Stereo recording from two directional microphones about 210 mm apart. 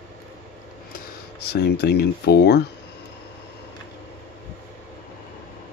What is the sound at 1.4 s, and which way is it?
Speech, 50° left (ahead or behind).